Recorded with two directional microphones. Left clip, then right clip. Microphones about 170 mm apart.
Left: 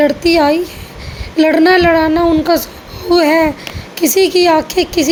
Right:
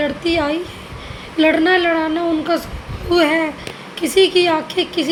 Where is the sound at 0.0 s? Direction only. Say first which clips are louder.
Left 8 dB; 40° left (ahead or behind).